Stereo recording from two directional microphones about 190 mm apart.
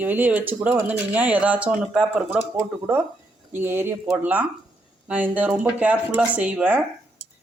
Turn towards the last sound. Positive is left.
turn(degrees=-10)  # may be behind; listen again after turning